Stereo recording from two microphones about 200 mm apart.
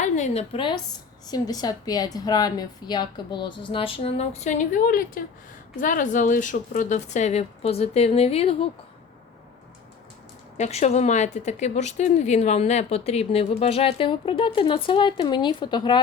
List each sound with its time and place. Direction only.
0.0 s a woman's voice: 35° left (ahead or behind)
10.6 s speech: 35° left (ahead or behind)